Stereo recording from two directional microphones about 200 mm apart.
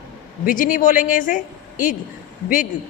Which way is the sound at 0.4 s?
40° left (ahead or behind).